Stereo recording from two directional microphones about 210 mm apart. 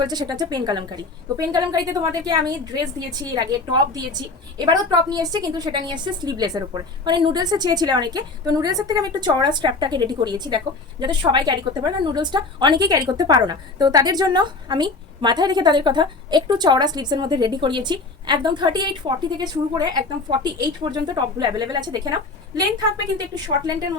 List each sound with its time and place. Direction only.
0.0 s a woman's voice: 20° right (ahead or behind)